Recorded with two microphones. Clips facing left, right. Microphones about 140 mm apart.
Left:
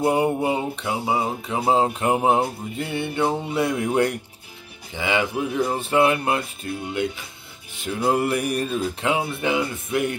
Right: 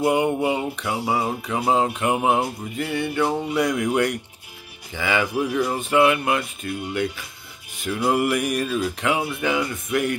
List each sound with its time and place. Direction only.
0.0 s mantra: 30° left (ahead or behind)